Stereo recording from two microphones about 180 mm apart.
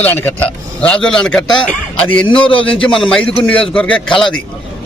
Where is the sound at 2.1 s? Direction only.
25° left (ahead or behind).